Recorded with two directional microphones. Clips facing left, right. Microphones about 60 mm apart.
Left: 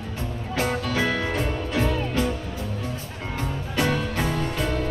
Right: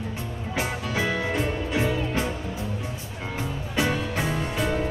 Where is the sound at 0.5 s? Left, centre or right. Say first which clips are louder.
Left 3 dB; centre.